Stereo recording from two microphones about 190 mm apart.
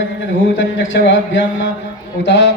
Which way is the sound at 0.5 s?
80° left.